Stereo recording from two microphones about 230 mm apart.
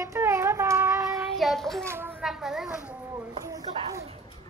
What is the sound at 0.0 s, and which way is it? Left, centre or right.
Child singing, centre.